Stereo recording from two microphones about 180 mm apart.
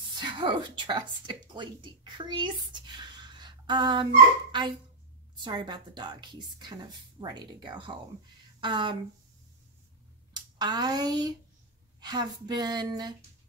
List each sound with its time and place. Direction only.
0.1 s a woman's voice: 25° right (ahead or behind)
10.3 s speech: 25° right (ahead or behind)